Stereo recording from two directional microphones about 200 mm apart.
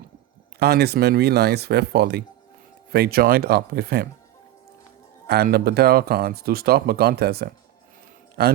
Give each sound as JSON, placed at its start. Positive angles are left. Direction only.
{"t": 0.6, "sound": "speech", "side_deg": -55}
{"t": 5.3, "sound": "speech", "side_deg": -50}